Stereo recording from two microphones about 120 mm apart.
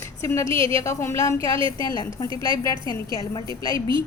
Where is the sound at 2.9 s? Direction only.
30° left (ahead or behind).